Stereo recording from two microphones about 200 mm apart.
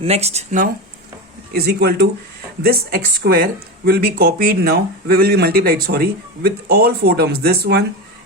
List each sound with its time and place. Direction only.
0.0 s speech: 30° right (ahead or behind)
1.5 s speech: 50° right (ahead or behind)